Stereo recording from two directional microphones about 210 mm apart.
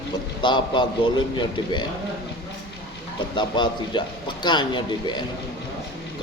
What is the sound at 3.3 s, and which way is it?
A man's voice, 20° left (ahead or behind).